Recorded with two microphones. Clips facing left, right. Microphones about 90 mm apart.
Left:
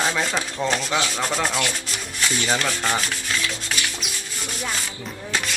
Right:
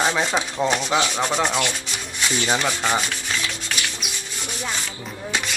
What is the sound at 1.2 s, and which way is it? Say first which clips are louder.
Rub: right 2 dB; centre (ahead or behind).